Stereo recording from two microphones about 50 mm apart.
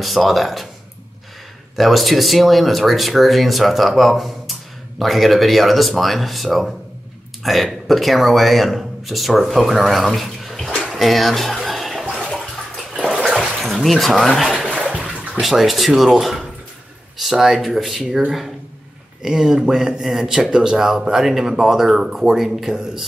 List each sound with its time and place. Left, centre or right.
0.0 s speech: centre
1.8 s speech: centre
10.9 s bathtub: centre
13.3 s a sound: centre
15.4 s speech: centre
19.2 s speech: centre